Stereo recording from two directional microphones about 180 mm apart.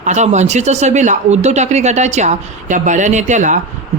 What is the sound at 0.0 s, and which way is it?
Speech, 40° right (ahead or behind).